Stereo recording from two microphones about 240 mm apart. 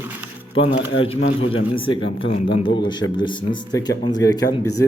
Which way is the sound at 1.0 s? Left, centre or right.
Left.